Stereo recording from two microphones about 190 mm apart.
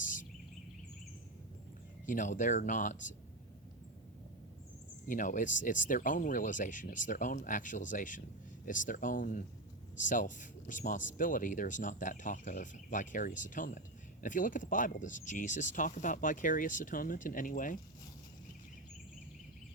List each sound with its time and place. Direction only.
0.0 s a sound: 45° left (ahead or behind)
2.0 s speech: 40° left (ahead or behind)
5.0 s speech: 45° left (ahead or behind)